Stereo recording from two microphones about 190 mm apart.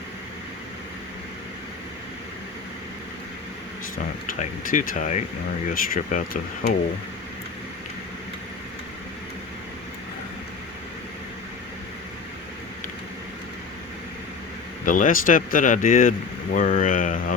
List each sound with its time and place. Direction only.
4.4 s speech: 45° left (ahead or behind)
14.8 s speech: 45° left (ahead or behind)